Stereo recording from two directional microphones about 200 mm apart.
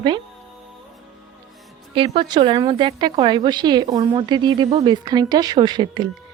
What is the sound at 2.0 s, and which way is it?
A woman's voice, 25° right (ahead or behind).